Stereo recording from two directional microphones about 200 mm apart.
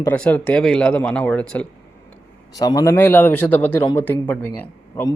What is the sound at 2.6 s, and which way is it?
Speech, 15° left (ahead or behind).